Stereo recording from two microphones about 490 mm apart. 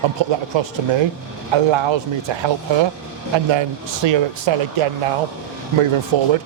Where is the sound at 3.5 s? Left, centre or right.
Right.